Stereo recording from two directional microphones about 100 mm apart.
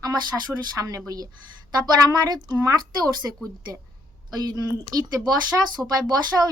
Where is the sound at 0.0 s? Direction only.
40° right (ahead or behind).